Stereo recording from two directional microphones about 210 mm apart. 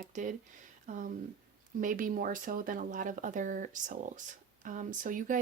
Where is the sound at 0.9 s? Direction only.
40° right (ahead or behind).